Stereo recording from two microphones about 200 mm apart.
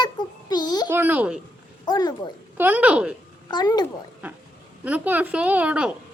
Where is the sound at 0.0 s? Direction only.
20° left (ahead or behind).